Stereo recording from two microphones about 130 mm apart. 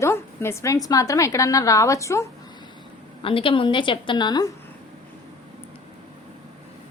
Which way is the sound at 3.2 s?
45° left (ahead or behind).